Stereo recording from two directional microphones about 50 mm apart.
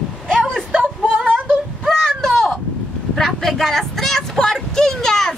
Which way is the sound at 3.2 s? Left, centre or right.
Centre.